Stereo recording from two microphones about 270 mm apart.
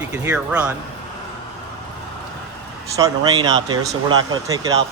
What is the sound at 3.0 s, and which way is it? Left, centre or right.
Speech, centre.